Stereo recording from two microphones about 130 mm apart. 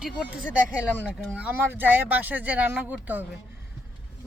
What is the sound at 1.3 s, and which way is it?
Speech, 15° right (ahead or behind).